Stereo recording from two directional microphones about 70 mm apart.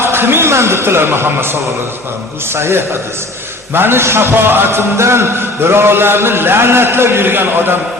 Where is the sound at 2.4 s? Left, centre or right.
Right.